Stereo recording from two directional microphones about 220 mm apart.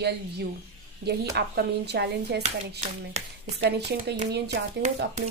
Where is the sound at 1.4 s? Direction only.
50° right (ahead or behind).